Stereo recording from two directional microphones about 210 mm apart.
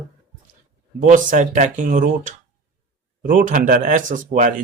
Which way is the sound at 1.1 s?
35° right (ahead or behind).